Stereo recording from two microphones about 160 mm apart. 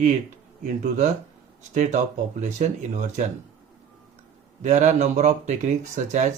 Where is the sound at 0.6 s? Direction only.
50° right (ahead or behind).